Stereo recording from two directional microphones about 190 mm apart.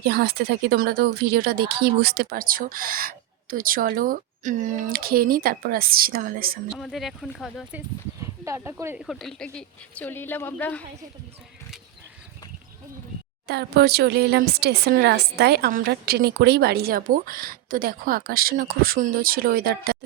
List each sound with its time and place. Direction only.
0.0 s speech: 55° right (ahead or behind)
6.7 s speech: centre (ahead or behind)
8.2 s speech: 15° right (ahead or behind)
9.0 s a woman's voice: centre (ahead or behind)
13.5 s speech: 60° right (ahead or behind)